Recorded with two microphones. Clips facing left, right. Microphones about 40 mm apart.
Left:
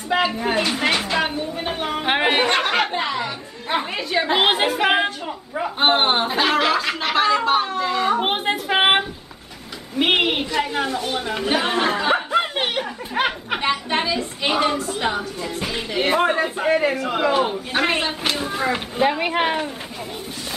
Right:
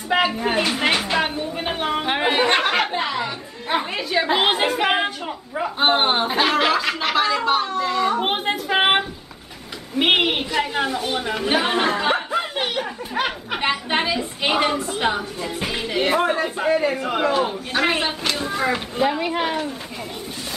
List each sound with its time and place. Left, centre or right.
0.3 s speech: centre
0.7 s a sound: centre
2.0 s chatter: centre
2.4 s music: centre
5.8 s speech: centre
6.2 s speech: centre
9.9 s a sound: centre
11.4 s speech: centre
13.6 s a woman's voice: centre
16.9 s a woman's voice: centre
17.3 s speech: centre
19.0 s speech: left